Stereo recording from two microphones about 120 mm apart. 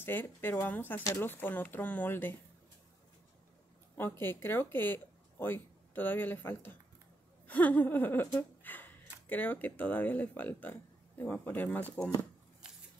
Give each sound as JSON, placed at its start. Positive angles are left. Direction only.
{"t": 0.0, "sound": "speech", "side_deg": 15}
{"t": 3.9, "sound": "speech", "side_deg": 15}